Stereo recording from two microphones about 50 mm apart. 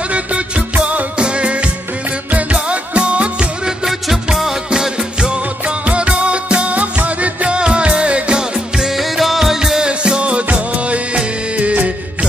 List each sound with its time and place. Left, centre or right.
0.1 s music: right
3.8 s music: centre; by 12.3 s right